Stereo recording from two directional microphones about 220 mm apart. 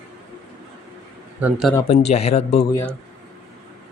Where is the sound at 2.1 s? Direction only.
30° left (ahead or behind).